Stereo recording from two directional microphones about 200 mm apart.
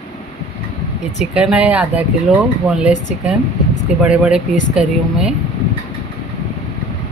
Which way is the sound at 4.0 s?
5° right (ahead or behind).